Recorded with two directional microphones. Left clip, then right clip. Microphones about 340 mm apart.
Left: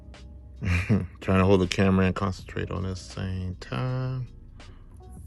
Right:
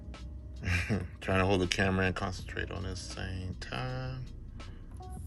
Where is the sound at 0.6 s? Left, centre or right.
Centre.